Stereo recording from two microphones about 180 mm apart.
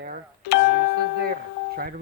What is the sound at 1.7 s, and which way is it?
Speech, 55° right (ahead or behind).